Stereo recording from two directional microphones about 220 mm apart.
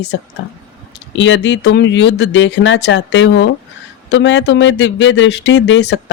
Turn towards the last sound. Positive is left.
turn(degrees=55)  # may be behind; listen again after turning